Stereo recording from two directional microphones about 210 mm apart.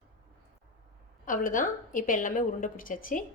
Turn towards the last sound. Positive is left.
turn(degrees=40)  # may be behind; listen again after turning